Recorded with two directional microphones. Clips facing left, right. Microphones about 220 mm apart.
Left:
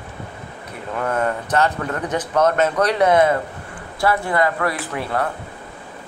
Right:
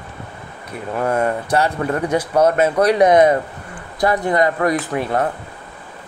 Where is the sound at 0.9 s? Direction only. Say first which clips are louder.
Right 3 dB; 30° right (ahead or behind).